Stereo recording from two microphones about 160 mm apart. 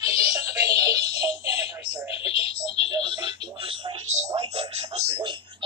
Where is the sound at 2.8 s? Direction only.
30° right (ahead or behind).